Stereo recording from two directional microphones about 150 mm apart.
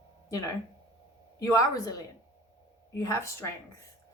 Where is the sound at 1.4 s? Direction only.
20° left (ahead or behind).